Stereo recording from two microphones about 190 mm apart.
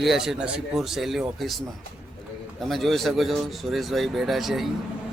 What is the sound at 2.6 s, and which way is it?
A man's voice, centre (ahead or behind).